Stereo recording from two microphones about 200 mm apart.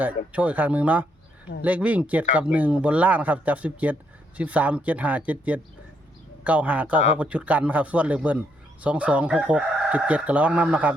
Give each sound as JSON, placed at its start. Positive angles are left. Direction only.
{"t": 0.0, "sound": "a man's voice", "side_deg": -5}